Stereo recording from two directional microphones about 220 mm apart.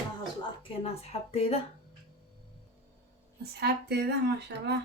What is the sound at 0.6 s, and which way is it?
Speech, 25° left (ahead or behind).